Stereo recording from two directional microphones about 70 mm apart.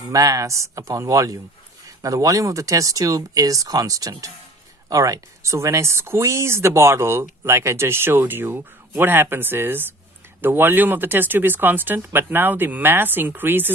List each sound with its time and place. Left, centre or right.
0.1 s speech: right